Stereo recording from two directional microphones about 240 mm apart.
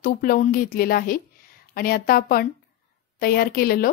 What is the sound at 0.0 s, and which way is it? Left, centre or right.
Speech, left.